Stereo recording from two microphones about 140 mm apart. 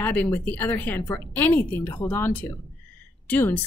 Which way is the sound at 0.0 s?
15° left (ahead or behind).